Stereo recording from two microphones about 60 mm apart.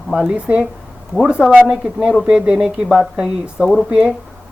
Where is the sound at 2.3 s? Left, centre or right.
Centre.